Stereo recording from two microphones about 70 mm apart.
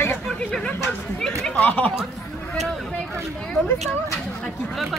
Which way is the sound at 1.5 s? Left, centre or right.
Left.